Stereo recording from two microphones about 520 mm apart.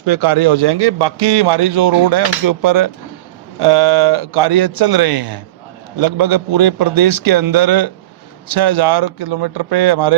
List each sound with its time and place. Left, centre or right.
0.0 s a man's voice: right